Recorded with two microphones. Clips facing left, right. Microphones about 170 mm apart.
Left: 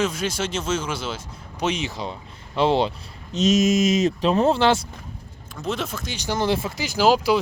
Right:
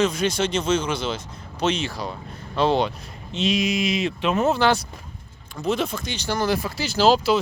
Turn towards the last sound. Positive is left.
turn(degrees=10)  # may be behind; listen again after turning